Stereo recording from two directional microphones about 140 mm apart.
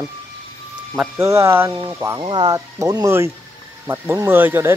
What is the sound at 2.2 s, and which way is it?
Speech, 30° right (ahead or behind).